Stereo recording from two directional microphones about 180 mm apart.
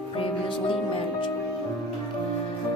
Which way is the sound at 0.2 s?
30° left (ahead or behind).